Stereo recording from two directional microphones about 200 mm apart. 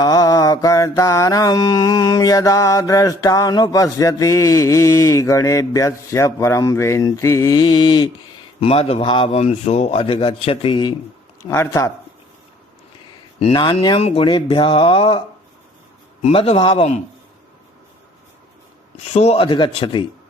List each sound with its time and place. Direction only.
0.0 s mantra: 20° left (ahead or behind)
8.6 s speech: 30° left (ahead or behind)
11.4 s mantra: 15° left (ahead or behind)
13.4 s speech: 25° left (ahead or behind)
16.2 s a man's voice: 30° left (ahead or behind)
19.1 s speech: 30° left (ahead or behind)